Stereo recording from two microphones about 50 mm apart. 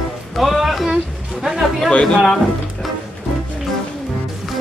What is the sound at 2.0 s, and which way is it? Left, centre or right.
Speech, centre.